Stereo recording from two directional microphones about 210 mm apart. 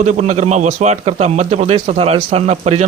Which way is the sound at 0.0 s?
35° right (ahead or behind).